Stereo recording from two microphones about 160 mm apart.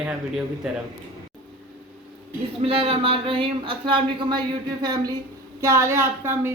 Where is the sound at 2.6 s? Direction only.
35° right (ahead or behind).